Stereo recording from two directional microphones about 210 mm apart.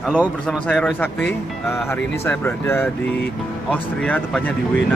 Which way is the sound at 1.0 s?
10° left (ahead or behind).